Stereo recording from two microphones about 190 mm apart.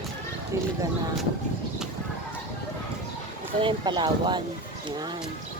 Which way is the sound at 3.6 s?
25° right (ahead or behind).